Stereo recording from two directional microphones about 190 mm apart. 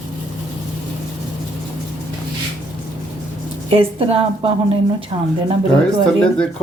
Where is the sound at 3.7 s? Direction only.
30° right (ahead or behind).